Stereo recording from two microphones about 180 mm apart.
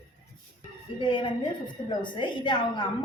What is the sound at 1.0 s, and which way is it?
A woman's voice, 25° left (ahead or behind).